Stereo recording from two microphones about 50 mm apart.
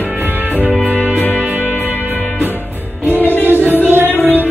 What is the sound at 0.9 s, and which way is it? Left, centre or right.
Music, left.